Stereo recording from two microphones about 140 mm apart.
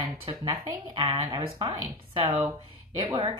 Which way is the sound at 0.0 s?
40° right (ahead or behind).